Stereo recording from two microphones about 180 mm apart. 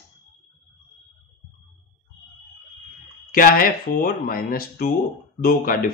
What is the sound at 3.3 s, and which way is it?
Speech, 50° left (ahead or behind).